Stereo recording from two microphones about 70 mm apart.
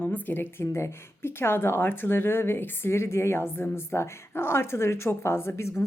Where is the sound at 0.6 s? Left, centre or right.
Left.